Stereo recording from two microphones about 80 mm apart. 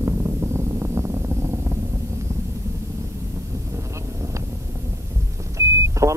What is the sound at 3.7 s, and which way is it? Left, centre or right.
Wind noise, right.